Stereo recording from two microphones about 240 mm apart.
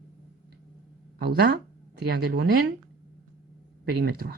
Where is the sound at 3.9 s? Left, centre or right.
Right.